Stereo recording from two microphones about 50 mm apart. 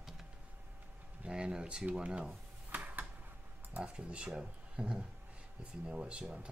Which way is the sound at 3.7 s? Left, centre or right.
Right.